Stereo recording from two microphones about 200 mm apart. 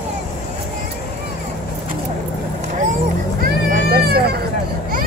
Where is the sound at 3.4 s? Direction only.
50° right (ahead or behind).